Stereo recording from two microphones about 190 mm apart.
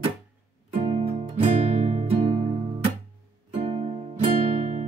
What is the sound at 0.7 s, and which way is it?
Music, 35° right (ahead or behind).